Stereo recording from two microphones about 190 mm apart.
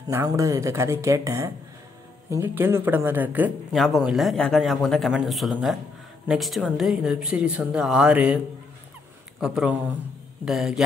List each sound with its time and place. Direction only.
0.1 s a woman's voice: 15° right (ahead or behind)
9.4 s a woman's voice: 5° right (ahead or behind)